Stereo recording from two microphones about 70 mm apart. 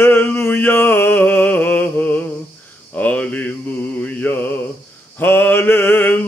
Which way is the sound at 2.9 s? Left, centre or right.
Centre.